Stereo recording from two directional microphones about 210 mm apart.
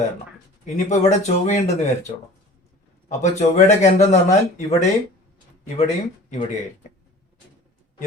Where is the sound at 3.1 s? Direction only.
35° left (ahead or behind).